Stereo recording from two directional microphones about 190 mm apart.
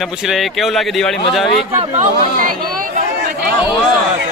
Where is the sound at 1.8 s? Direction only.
35° right (ahead or behind).